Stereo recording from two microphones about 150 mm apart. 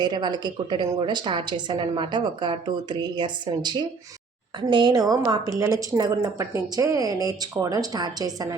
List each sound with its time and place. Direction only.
0.0 s a woman's voice: 30° right (ahead or behind)